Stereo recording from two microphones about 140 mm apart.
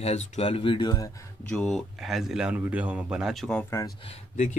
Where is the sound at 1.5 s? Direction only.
5° left (ahead or behind).